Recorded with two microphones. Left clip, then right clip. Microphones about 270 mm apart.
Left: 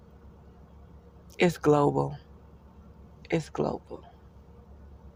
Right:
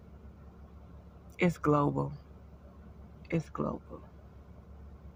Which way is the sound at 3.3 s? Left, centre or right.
Left.